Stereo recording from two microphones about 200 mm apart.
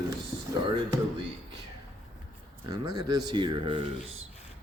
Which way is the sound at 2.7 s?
20° right (ahead or behind).